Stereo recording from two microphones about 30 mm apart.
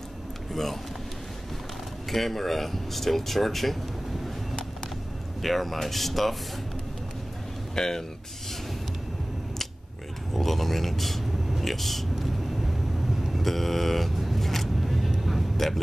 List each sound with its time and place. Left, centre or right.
0.5 s a sound: centre
2.0 s speech: centre
5.4 s speech: centre
7.7 s speech: centre
10.3 s speech: centre
12.2 s vehicle: centre